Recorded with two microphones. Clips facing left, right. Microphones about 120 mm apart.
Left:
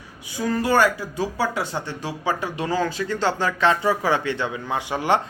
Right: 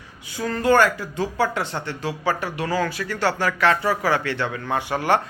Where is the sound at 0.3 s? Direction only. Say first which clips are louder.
Right 2 dB; 10° left (ahead or behind).